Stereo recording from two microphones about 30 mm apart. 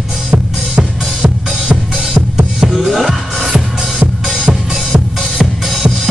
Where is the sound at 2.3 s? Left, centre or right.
Right.